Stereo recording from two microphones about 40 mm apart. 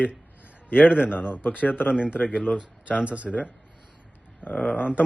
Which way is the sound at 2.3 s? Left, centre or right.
Right.